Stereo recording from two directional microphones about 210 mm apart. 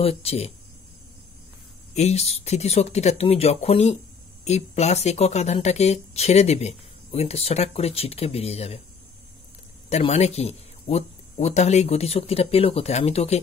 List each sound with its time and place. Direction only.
0.0 s speech: 30° left (ahead or behind)
2.0 s speech: 30° left (ahead or behind)
9.8 s speech: 30° left (ahead or behind)